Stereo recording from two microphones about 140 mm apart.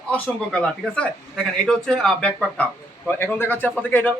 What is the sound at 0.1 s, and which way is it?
Speech, 10° left (ahead or behind).